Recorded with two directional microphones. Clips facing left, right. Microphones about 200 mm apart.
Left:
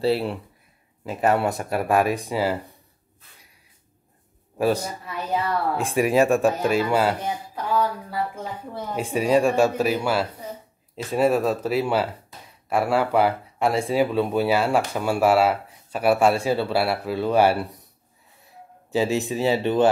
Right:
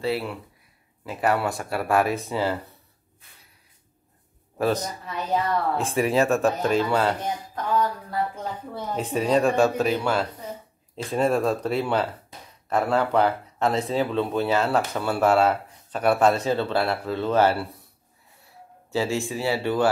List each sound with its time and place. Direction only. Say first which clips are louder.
0.0 s speech: left 4 dB; 30° left (ahead or behind)
1.0 s speech: left 3 dB; 20° left (ahead or behind)
4.6 s speech: left 2 dB; 10° left (ahead or behind)